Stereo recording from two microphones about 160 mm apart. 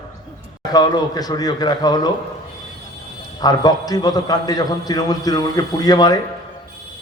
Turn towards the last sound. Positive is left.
turn(degrees=25)  # may be behind; listen again after turning